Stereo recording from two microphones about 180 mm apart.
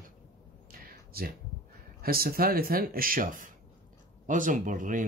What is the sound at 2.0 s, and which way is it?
Speech, 55° right (ahead or behind).